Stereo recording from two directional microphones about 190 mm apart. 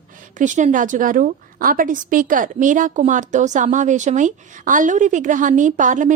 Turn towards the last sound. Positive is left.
turn(degrees=-40)  # may be behind; listen again after turning